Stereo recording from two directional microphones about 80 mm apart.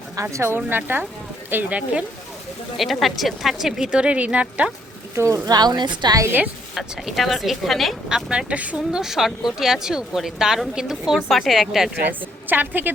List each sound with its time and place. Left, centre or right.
0.2 s a woman's voice: right; by 2.0 s centre
2.7 s speech: centre
5.1 s speech: right
6.7 s a woman's voice: centre
8.3 s speech: centre
9.0 s a woman's voice: centre
12.0 s a woman's voice: right